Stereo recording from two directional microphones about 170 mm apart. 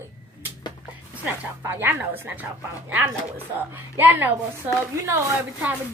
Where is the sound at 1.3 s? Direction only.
15° right (ahead or behind).